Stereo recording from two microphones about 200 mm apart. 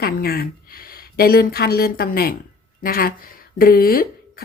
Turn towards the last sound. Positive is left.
turn(degrees=45)  # may be behind; listen again after turning